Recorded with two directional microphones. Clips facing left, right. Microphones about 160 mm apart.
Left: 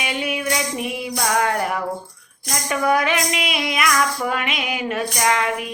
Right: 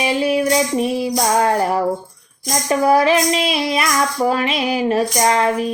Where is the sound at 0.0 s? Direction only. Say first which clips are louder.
Right 8 dB; 35° right (ahead or behind).